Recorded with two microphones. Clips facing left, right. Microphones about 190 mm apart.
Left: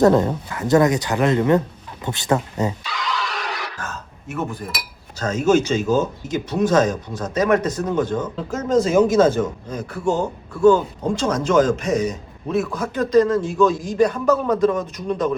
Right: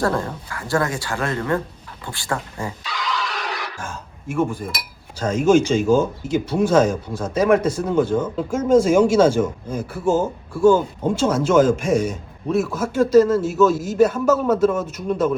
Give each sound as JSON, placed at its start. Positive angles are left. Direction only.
{"t": 0.0, "sound": "speech", "side_deg": 20}
{"t": 2.8, "sound": "music", "side_deg": 0}
{"t": 3.8, "sound": "speech", "side_deg": -10}
{"t": 5.2, "sound": "speech", "side_deg": -10}